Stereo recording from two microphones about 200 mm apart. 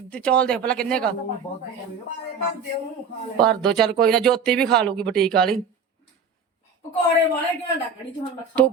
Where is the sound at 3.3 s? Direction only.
5° left (ahead or behind).